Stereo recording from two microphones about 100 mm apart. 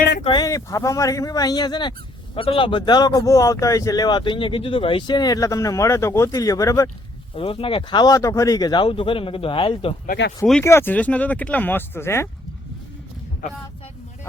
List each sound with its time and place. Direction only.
0.4 s speech: 35° left (ahead or behind)
7.3 s speech: 65° left (ahead or behind)
10.6 s speech: 25° left (ahead or behind)
10.9 s speech: 15° left (ahead or behind)